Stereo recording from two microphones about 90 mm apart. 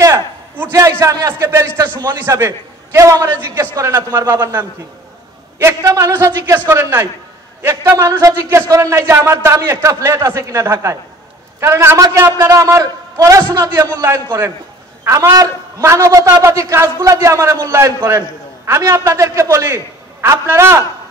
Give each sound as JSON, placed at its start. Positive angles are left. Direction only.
{"t": 0.7, "sound": "a man's voice", "side_deg": -35}
{"t": 5.8, "sound": "a man's voice", "side_deg": -35}
{"t": 8.1, "sound": "a man's voice", "side_deg": -35}
{"t": 12.0, "sound": "a man's voice", "side_deg": -40}
{"t": 14.0, "sound": "a man's voice", "side_deg": -35}